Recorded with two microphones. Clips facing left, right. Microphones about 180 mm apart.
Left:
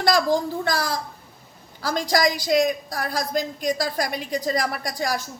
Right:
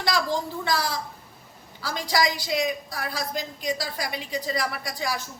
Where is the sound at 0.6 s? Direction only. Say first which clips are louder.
Left 2 dB; 45° left (ahead or behind).